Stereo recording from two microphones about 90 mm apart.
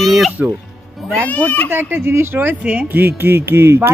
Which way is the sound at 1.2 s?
20° left (ahead or behind).